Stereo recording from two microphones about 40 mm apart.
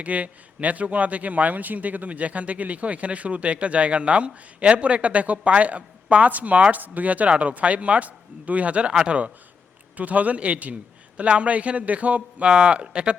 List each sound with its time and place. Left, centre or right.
0.0 s a man's voice: right